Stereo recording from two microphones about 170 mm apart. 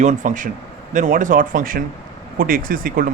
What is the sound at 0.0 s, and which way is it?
Speech, 45° right (ahead or behind).